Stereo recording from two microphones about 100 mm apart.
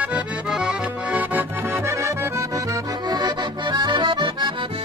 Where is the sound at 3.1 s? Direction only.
45° right (ahead or behind).